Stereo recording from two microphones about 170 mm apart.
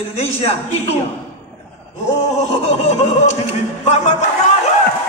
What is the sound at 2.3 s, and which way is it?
Speech, 40° left (ahead or behind).